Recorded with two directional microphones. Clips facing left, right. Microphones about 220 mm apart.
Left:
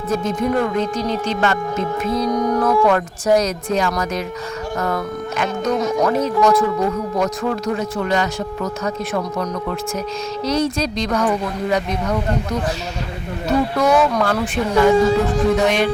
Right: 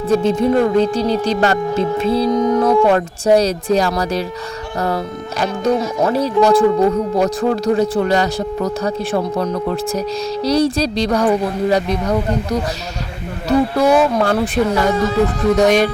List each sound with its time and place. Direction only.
0.1 s speech: 30° right (ahead or behind)
13.7 s speech: 30° right (ahead or behind)